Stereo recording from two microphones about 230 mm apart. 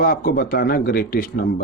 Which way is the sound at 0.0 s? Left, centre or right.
Left.